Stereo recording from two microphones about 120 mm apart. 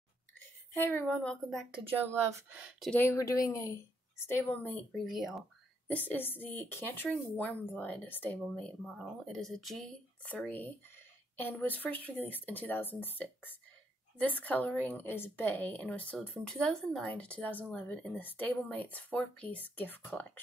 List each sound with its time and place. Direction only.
0.7 s speech: 15° left (ahead or behind)
1.9 s speech: 15° right (ahead or behind)
2.9 s speech: 20° left (ahead or behind)
4.3 s speech: 15° left (ahead or behind)
4.9 s speech: centre (ahead or behind)
5.9 s speech: 15° left (ahead or behind)
8.5 s speech: 5° left (ahead or behind)
11.3 s speech: 15° left (ahead or behind)